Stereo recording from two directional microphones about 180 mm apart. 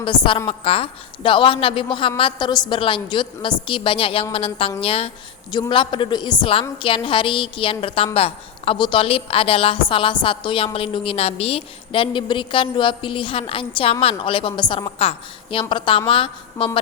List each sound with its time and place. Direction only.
0.3 s a woman's voice: 30° left (ahead or behind)